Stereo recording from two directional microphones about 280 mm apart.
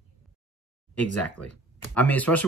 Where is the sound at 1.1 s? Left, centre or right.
Left.